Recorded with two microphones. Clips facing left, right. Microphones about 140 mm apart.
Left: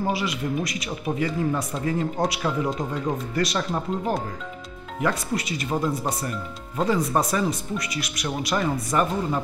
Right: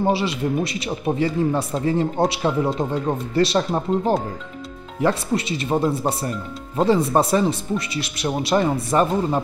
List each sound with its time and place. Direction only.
0.0 s speech: 30° right (ahead or behind)